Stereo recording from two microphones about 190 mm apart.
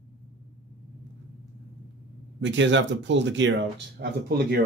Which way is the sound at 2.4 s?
75° right (ahead or behind).